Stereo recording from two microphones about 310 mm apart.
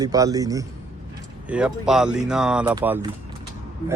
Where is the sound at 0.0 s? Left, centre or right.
Centre.